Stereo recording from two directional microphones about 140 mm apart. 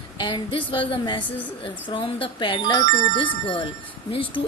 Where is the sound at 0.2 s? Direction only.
35° left (ahead or behind).